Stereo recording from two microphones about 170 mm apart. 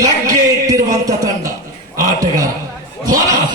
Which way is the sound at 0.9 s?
20° right (ahead or behind).